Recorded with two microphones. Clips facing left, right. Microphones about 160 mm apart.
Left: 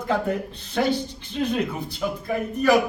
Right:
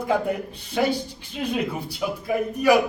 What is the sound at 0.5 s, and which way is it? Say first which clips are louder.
Speech: even; 10° right (ahead or behind).